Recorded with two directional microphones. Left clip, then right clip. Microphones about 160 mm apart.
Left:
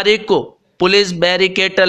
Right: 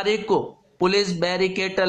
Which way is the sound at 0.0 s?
20° left (ahead or behind).